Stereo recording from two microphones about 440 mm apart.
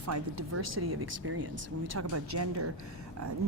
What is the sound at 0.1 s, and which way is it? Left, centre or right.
Speech, right.